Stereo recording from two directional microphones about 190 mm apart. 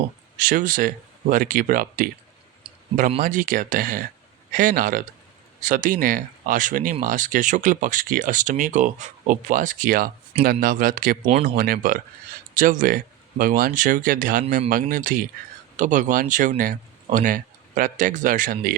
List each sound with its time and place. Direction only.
0.3 s speech: 45° right (ahead or behind)
3.1 s speech: 45° right (ahead or behind)
11.3 s speech: 35° right (ahead or behind)
11.5 s speech: 45° right (ahead or behind)
14.4 s speech: 30° right (ahead or behind)
14.7 s speech: 45° right (ahead or behind)